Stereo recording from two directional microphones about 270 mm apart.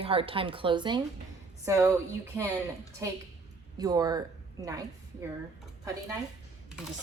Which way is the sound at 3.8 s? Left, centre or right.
Centre.